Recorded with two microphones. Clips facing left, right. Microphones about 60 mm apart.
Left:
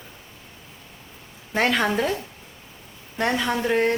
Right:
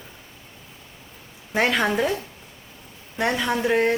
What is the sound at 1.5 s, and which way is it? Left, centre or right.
Speech, centre.